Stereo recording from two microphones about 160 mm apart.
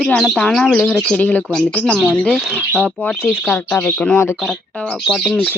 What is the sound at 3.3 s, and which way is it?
A woman's voice, 10° left (ahead or behind).